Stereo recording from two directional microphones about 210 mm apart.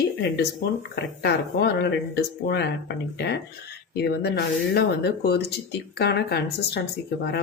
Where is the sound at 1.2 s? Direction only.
50° left (ahead or behind).